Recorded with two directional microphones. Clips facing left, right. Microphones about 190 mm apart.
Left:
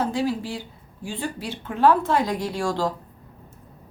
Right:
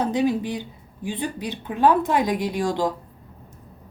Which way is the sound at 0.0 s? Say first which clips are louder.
Right 3 dB; 20° right (ahead or behind).